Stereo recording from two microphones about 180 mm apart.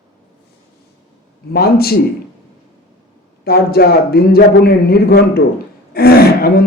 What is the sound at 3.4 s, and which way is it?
Speech, 60° left (ahead or behind).